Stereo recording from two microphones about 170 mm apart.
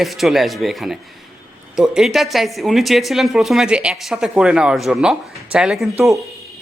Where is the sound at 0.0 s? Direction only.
Centre (ahead or behind).